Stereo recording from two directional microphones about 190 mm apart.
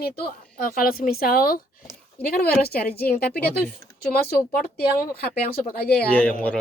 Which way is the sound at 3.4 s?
10° left (ahead or behind).